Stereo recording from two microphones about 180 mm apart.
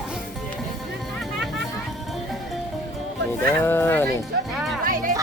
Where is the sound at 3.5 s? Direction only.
15° left (ahead or behind).